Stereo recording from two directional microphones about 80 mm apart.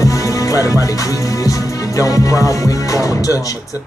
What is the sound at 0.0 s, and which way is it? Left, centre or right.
Music, left.